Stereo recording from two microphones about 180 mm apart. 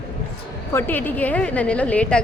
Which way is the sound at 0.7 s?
10° left (ahead or behind).